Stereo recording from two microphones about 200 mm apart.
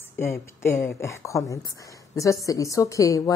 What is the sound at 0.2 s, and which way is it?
A woman's voice, 15° left (ahead or behind).